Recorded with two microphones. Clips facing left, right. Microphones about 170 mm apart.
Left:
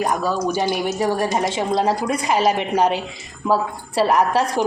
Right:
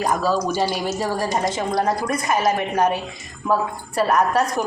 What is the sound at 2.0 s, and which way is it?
Speech, 10° left (ahead or behind).